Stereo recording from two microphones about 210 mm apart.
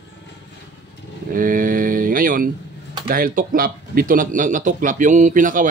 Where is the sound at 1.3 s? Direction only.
40° right (ahead or behind).